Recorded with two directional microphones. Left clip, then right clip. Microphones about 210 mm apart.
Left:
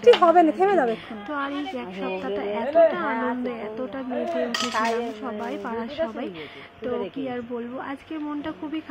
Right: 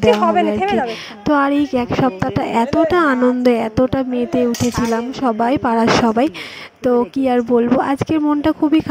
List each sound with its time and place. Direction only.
0.3 s speech: 10° left (ahead or behind)
0.8 s a woman's voice: 55° right (ahead or behind)